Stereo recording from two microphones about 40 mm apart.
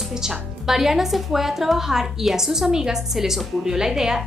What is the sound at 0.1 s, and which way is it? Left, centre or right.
A woman's voice, centre.